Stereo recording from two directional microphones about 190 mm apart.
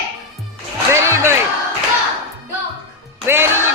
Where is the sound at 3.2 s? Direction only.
10° right (ahead or behind).